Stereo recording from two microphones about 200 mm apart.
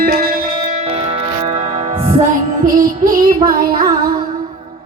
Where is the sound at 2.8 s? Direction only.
45° right (ahead or behind).